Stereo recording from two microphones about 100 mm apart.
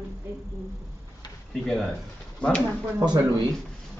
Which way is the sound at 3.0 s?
50° right (ahead or behind).